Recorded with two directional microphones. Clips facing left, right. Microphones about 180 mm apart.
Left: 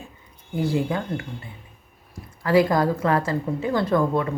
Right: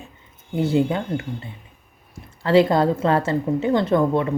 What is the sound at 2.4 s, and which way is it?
A woman's voice, 25° right (ahead or behind).